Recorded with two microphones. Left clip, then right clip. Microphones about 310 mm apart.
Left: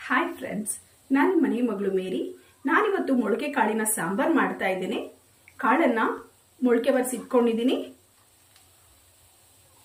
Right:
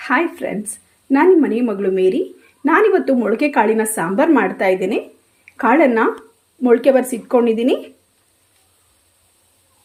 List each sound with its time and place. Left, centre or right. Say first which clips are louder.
0.0 s a woman's voice: right 8 dB; centre